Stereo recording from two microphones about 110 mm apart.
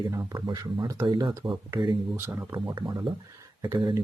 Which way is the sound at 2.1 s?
20° right (ahead or behind).